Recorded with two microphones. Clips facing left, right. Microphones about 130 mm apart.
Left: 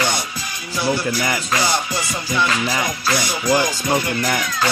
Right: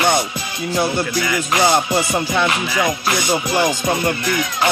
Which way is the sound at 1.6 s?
55° right (ahead or behind).